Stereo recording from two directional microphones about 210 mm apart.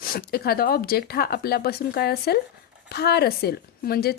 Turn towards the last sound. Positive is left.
turn(degrees=45)  # may be behind; listen again after turning